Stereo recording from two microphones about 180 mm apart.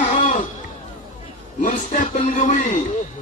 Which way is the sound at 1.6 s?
40° left (ahead or behind).